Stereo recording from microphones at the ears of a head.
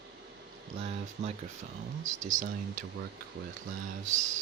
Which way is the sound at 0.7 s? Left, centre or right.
Right.